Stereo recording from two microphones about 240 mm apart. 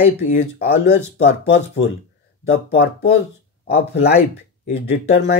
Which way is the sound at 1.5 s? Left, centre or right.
Left.